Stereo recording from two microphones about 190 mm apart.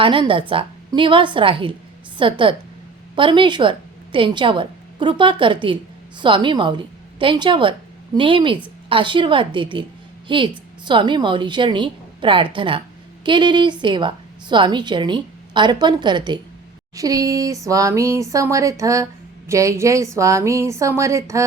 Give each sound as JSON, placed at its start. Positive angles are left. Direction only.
{"t": 0.0, "sound": "a woman's voice", "side_deg": -25}